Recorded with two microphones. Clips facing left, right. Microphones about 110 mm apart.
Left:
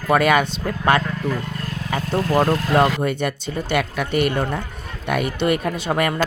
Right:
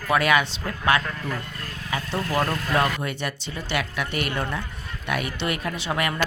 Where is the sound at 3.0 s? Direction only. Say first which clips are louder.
Left 7 dB; 50° left (ahead or behind).